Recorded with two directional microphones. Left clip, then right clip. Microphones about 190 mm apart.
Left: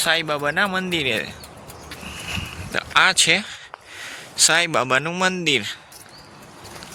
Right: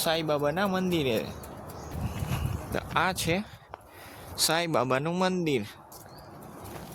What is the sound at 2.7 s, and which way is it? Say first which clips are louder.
Speech: left 11 dB; 15° right (ahead or behind).